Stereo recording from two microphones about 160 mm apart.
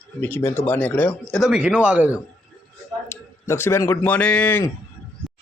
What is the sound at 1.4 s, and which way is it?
Speech, 5° right (ahead or behind).